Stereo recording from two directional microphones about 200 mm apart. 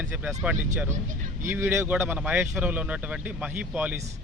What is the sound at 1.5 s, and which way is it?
Speech, 10° right (ahead or behind).